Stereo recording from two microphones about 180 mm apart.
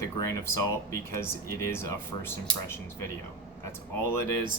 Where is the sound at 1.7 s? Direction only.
15° left (ahead or behind).